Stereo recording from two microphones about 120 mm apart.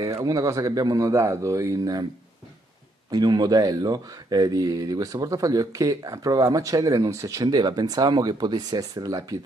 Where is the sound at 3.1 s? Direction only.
35° right (ahead or behind).